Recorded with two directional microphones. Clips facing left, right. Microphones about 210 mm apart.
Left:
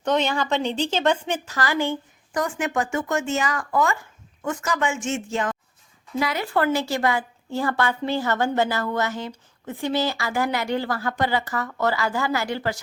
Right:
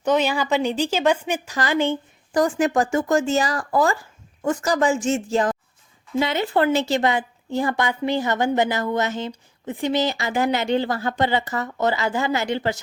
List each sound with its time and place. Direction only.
0.0 s a woman's voice: 5° right (ahead or behind)
2.3 s speech: 35° right (ahead or behind)
6.1 s a woman's voice: 25° right (ahead or behind)